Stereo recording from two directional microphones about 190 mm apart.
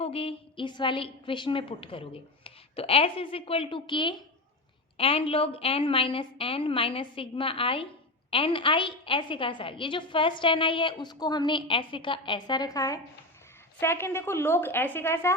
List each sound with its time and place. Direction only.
0.0 s a woman's voice: 30° left (ahead or behind); by 15.3 s 15° left (ahead or behind)